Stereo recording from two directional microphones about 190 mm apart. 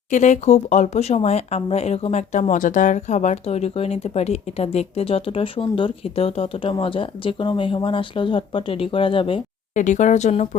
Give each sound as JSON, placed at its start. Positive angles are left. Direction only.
{"t": 0.1, "sound": "speech", "side_deg": 40}
{"t": 9.7, "sound": "speech", "side_deg": 40}